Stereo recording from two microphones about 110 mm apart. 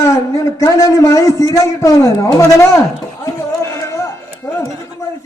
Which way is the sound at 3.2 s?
30° left (ahead or behind).